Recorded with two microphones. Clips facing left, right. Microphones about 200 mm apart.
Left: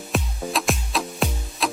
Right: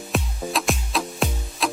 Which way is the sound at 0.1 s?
Centre (ahead or behind).